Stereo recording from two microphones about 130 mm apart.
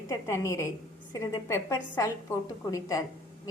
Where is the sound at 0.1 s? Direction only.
20° left (ahead or behind).